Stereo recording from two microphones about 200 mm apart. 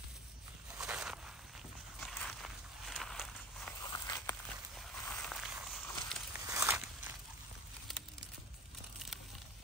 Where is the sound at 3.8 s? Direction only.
20° left (ahead or behind).